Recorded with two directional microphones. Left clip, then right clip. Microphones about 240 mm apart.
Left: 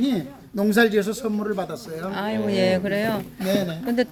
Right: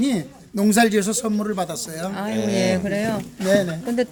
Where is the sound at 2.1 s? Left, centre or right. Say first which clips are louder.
Even; centre.